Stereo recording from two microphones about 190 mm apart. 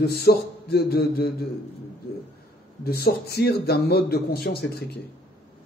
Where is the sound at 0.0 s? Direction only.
55° left (ahead or behind).